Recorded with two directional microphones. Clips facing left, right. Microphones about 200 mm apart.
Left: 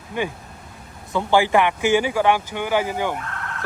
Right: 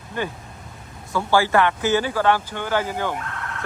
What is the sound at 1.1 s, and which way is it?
Speech, 15° left (ahead or behind).